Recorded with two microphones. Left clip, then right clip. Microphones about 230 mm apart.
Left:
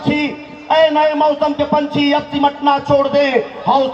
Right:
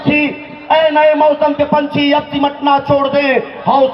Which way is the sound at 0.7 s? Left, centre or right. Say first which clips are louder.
Right 2 dB; right.